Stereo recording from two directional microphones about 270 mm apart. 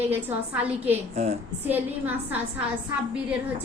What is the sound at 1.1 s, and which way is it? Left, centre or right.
Mantra, right.